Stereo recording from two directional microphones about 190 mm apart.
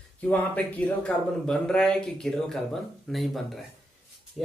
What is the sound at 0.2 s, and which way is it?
Speech, 10° left (ahead or behind).